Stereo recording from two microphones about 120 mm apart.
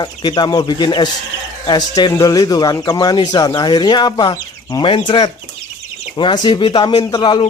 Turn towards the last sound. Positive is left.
turn(degrees=40)  # may be behind; listen again after turning